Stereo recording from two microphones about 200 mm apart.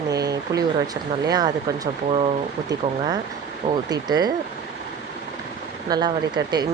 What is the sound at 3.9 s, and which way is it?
Speech, 20° right (ahead or behind).